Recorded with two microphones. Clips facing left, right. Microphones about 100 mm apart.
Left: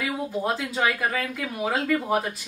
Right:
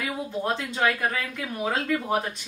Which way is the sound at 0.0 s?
5° left (ahead or behind).